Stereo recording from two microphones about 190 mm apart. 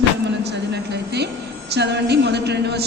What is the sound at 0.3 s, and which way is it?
A woman's voice, 65° right (ahead or behind).